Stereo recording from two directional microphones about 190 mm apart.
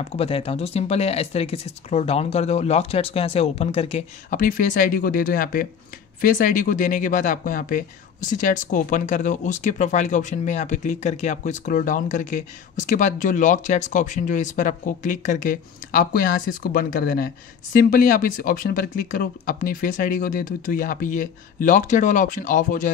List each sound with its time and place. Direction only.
0.0 s speech: 30° left (ahead or behind)